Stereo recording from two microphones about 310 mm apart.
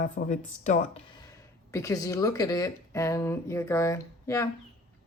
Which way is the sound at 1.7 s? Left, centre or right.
Centre.